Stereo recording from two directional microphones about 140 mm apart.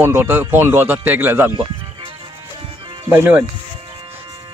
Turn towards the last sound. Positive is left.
turn(degrees=-15)  # may be behind; listen again after turning